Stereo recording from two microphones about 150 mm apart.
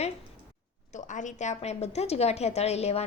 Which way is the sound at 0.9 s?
55° left (ahead or behind).